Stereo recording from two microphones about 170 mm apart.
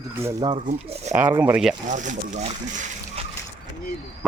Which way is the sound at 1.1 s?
10° right (ahead or behind).